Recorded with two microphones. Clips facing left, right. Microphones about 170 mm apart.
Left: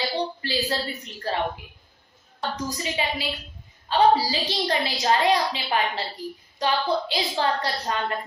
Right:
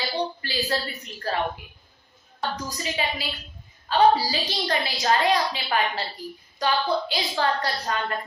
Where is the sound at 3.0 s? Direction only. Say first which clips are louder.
Even; 25° left (ahead or behind).